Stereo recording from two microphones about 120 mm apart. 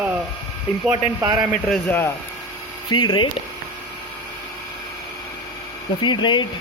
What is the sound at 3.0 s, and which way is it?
Speech, 35° left (ahead or behind).